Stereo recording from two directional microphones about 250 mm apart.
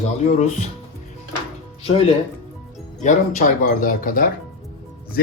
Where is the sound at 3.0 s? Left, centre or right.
Left.